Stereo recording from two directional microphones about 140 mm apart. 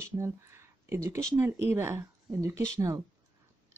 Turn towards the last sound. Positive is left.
turn(degrees=-25)  # may be behind; listen again after turning